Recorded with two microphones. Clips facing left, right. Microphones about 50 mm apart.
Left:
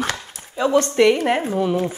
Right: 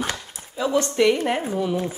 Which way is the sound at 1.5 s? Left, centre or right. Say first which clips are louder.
Left 4 dB; left.